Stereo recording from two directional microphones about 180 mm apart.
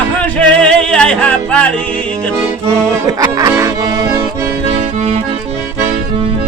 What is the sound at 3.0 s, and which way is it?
Music, 20° right (ahead or behind).